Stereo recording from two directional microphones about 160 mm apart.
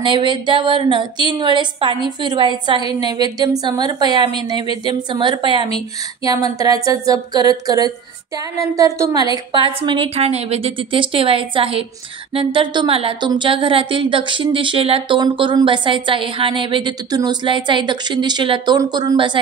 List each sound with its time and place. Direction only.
0.0 s a woman's voice: 30° right (ahead or behind)